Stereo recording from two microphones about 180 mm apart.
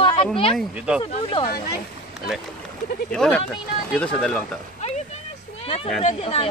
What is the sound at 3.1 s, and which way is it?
A man's voice, 5° left (ahead or behind).